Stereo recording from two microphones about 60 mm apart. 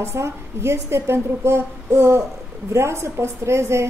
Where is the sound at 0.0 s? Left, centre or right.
Right.